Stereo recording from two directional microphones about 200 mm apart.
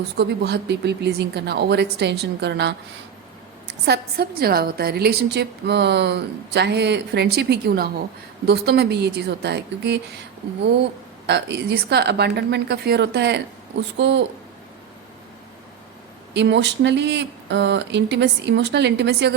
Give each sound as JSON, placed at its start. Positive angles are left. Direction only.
{"t": 0.2, "sound": "a woman's voice", "side_deg": -55}
{"t": 3.8, "sound": "a woman's voice", "side_deg": -55}
{"t": 11.3, "sound": "a woman's voice", "side_deg": -55}
{"t": 16.3, "sound": "a woman's voice", "side_deg": -60}